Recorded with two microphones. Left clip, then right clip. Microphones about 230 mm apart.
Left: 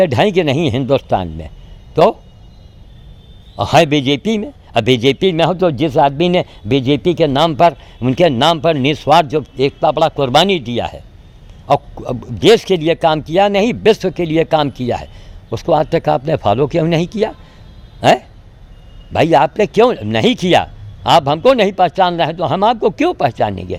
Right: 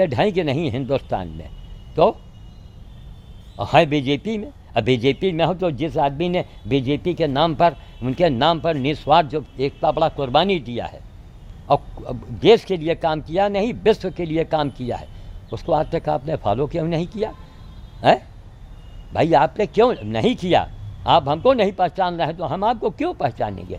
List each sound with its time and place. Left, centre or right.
0.0 s a man's voice: left
3.6 s a man's voice: left